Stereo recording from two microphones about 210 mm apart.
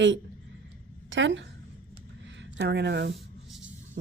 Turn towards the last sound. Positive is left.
turn(degrees=-50)  # may be behind; listen again after turning